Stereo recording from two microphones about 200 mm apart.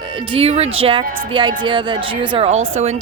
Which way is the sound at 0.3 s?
30° right (ahead or behind).